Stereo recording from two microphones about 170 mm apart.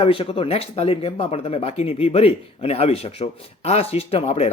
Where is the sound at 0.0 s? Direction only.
35° left (ahead or behind).